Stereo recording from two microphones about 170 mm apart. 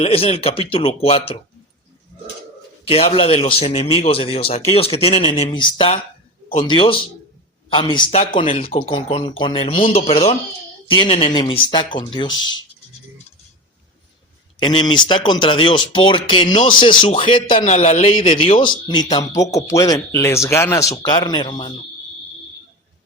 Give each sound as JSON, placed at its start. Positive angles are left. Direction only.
{"t": 0.0, "sound": "a man's voice", "side_deg": 35}
{"t": 2.8, "sound": "a man's voice", "side_deg": 35}
{"t": 14.6, "sound": "speech", "side_deg": 25}
{"t": 17.7, "sound": "a man's voice", "side_deg": 40}